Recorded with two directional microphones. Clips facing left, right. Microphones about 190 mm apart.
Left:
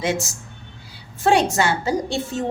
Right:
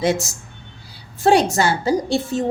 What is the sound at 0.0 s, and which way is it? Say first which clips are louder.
A woman's voice: right 4 dB; 40° right (ahead or behind).